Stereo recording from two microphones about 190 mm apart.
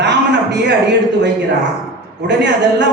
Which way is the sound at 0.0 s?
65° right (ahead or behind).